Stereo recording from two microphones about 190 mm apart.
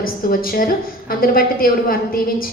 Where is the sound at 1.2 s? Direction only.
50° left (ahead or behind).